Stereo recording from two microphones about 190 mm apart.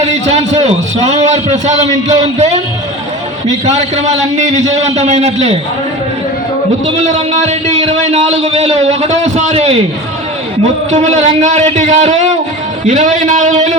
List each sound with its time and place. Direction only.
0.0 s a man's voice: 35° right (ahead or behind)
3.7 s a man's voice: 35° right (ahead or behind)
6.8 s a man's voice: 35° right (ahead or behind)